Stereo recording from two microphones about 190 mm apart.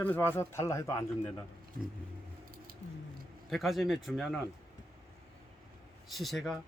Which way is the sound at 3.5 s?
Centre (ahead or behind).